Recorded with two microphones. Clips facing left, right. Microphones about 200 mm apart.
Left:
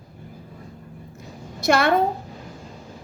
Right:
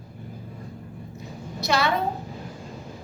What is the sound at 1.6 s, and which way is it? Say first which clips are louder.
Speech: left 5 dB; 50° left (ahead or behind).